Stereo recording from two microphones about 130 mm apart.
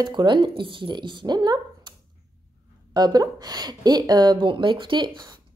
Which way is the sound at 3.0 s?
30° right (ahead or behind).